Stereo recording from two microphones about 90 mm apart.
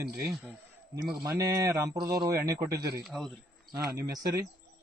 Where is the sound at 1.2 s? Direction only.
40° right (ahead or behind).